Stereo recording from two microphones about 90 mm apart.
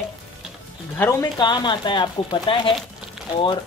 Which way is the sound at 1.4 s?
55° left (ahead or behind).